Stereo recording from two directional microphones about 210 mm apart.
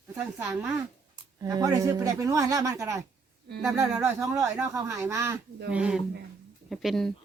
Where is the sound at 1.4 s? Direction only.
15° right (ahead or behind).